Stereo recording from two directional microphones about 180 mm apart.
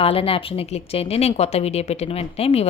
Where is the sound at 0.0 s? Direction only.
30° left (ahead or behind).